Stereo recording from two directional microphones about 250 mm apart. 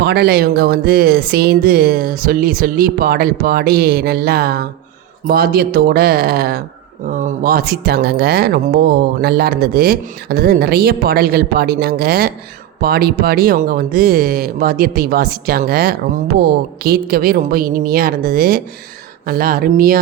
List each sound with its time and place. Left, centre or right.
0.0 s speech: right